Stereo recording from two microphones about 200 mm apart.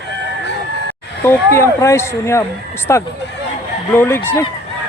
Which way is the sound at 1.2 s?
10° left (ahead or behind).